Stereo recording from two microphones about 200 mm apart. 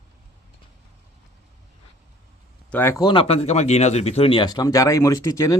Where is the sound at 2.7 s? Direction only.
10° left (ahead or behind).